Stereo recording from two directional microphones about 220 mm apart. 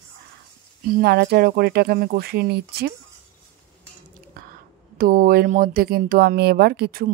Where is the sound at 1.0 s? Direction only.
45° right (ahead or behind).